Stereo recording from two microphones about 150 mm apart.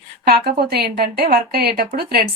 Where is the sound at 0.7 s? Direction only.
90° right.